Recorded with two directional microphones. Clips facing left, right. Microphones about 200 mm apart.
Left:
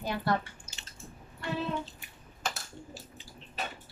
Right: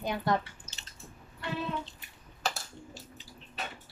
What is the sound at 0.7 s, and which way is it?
Squish, 10° left (ahead or behind).